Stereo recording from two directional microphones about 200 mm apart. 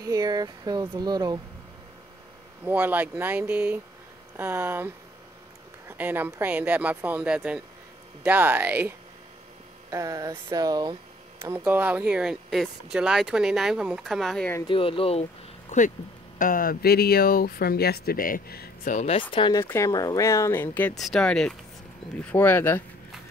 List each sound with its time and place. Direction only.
0.0 s speech: 20° right (ahead or behind)
2.6 s a woman's voice: 10° right (ahead or behind)
14.7 s speech: 25° left (ahead or behind)
16.3 s speech: 45° left (ahead or behind)
18.9 s speech: 30° left (ahead or behind); by 22.8 s 10° left (ahead or behind)